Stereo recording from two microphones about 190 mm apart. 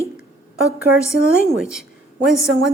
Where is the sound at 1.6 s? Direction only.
Centre (ahead or behind).